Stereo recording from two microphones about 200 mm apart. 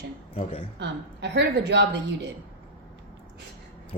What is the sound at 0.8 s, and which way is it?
A woman's voice, 60° right (ahead or behind).